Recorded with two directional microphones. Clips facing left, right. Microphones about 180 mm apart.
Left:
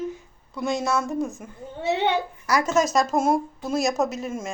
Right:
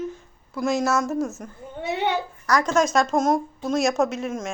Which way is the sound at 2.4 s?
5° left (ahead or behind).